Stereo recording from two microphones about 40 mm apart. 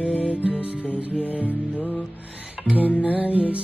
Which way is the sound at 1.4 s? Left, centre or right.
Left.